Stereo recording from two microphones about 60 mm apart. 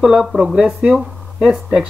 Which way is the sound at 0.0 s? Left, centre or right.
Centre.